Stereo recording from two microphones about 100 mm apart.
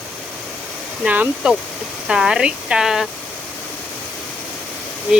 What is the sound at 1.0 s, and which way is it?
Speech, 15° right (ahead or behind).